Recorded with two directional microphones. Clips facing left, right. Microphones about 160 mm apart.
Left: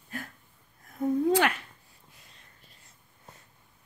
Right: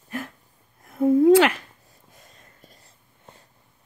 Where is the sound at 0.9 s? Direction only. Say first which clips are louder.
Right 10 dB; 90° right.